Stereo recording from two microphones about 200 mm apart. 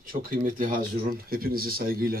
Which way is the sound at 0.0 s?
45° right (ahead or behind).